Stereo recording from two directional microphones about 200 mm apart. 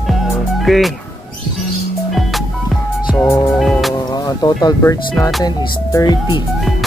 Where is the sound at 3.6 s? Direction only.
Centre (ahead or behind).